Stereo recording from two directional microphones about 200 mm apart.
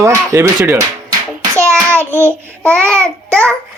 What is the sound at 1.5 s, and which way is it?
Child singing, 15° right (ahead or behind).